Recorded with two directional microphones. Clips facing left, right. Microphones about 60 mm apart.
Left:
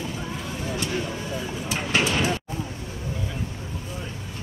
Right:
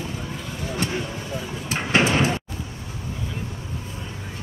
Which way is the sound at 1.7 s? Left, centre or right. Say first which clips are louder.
Right 4 dB; right.